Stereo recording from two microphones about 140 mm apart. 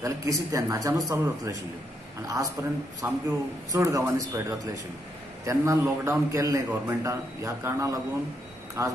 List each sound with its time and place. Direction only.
0.0 s speech: 20° right (ahead or behind)